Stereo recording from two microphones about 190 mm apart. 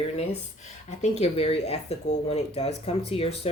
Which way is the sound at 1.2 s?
35° left (ahead or behind).